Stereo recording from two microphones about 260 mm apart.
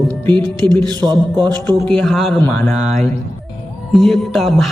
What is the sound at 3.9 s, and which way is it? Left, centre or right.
Speech, centre.